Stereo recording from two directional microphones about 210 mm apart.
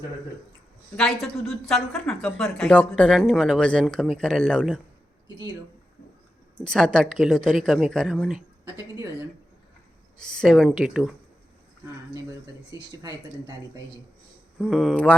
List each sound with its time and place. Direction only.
0.9 s a woman's voice: centre (ahead or behind)
6.7 s a woman's voice: 5° left (ahead or behind)
8.6 s a woman's voice: 15° right (ahead or behind)
10.2 s a woman's voice: 5° left (ahead or behind)
14.6 s a woman's voice: centre (ahead or behind)